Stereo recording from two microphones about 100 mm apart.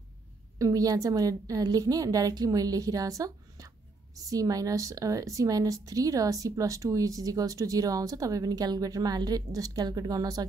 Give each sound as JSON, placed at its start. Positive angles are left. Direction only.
{"t": 0.6, "sound": "a woman's voice", "side_deg": -35}